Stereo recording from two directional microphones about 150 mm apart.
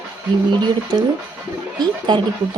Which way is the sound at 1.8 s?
30° right (ahead or behind).